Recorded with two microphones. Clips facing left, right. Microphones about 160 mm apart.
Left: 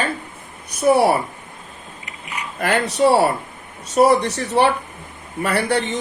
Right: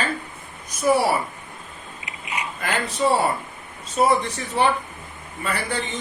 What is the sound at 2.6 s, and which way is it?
Speech, 70° left (ahead or behind).